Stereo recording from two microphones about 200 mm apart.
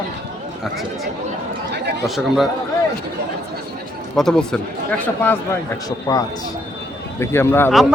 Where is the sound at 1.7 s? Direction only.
55° right (ahead or behind).